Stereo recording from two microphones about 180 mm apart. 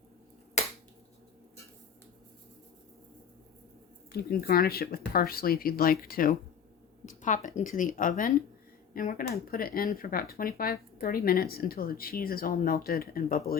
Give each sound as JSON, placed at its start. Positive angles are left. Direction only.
{"t": 0.6, "sound": "finger snapping", "side_deg": 40}
{"t": 4.1, "sound": "speech", "side_deg": 55}